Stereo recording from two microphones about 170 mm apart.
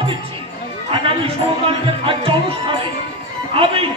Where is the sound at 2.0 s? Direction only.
30° right (ahead or behind).